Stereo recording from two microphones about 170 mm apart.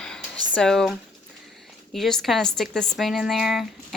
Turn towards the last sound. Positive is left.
turn(degrees=0)  # may be behind; listen again after turning